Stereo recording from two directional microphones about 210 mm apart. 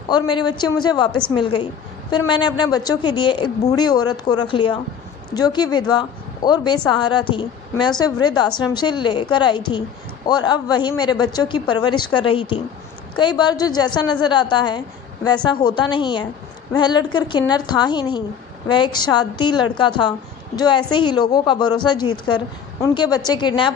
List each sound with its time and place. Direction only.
0.1 s a woman's voice: 20° left (ahead or behind)